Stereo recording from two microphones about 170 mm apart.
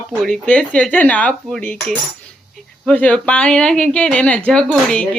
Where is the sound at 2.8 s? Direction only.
5° left (ahead or behind).